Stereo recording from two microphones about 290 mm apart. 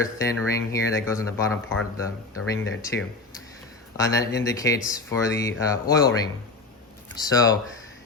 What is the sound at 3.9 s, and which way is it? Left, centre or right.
Speech, centre.